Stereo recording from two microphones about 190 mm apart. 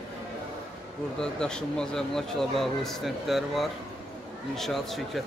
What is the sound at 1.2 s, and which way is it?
Speech, 5° left (ahead or behind).